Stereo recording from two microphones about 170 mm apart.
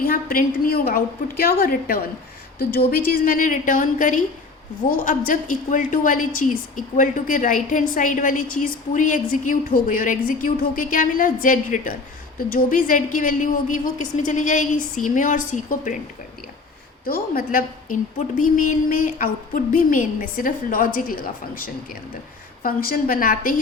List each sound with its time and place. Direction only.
0.0 s a woman's voice: 55° left (ahead or behind)
17.1 s a woman's voice: 60° left (ahead or behind)